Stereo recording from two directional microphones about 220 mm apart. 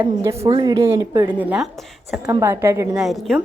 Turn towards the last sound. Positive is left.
turn(degrees=0)  # may be behind; listen again after turning